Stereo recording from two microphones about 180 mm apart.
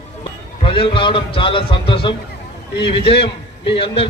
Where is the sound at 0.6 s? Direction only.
30° left (ahead or behind).